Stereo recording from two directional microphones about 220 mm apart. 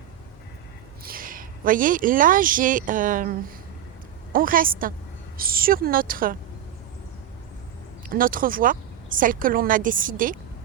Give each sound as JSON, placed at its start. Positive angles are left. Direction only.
{"t": 1.0, "sound": "speech", "side_deg": -40}
{"t": 8.1, "sound": "speech", "side_deg": -40}